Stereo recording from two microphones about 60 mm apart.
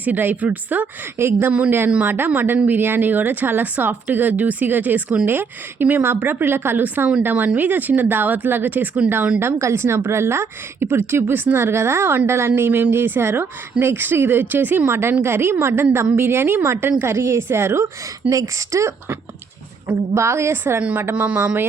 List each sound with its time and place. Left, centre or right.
0.0 s speech: right
1.2 s a woman's voice: right
5.2 s a woman's voice: right
9.4 s a woman's voice: right
14.8 s a woman's voice: right
18.3 s speech: right
20.1 s a woman's voice: right
20.8 s speech: right